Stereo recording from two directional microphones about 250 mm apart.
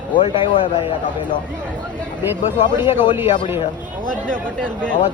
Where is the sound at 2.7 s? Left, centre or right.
Centre.